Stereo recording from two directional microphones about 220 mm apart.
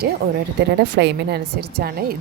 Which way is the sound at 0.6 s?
50° right (ahead or behind).